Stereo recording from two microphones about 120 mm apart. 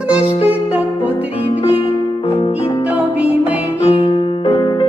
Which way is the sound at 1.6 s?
50° left (ahead or behind).